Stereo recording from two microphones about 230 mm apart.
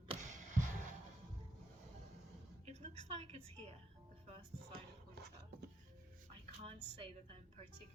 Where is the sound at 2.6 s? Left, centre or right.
Right.